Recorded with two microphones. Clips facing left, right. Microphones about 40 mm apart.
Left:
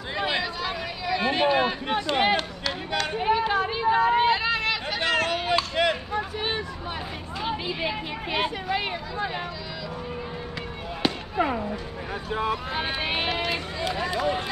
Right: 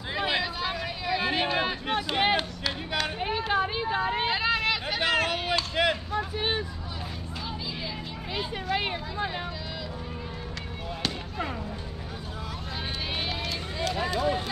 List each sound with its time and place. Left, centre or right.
0.1 s a sound: centre
3.1 s a sound: centre
3.8 s vehicle: centre
4.2 s vehicle: centre
7.4 s a sound: left
8.7 s speech: centre
11.0 s fireworks: centre
12.3 s speech: left
14.1 s run: left